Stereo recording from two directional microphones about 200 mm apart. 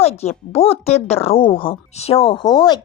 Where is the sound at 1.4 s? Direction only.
25° left (ahead or behind).